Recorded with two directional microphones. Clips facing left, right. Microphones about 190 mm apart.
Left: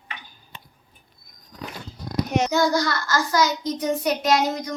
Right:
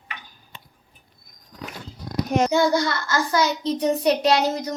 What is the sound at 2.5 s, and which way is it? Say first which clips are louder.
A child's voice: right 1 dB; 25° right (ahead or behind).